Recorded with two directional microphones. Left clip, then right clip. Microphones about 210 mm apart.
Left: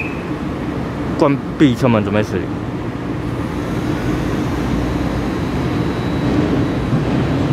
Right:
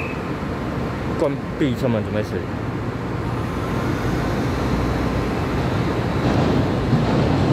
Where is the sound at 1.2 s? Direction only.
20° left (ahead or behind).